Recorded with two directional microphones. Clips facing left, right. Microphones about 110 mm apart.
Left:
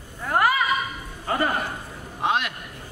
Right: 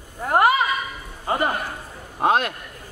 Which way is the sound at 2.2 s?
40° right (ahead or behind).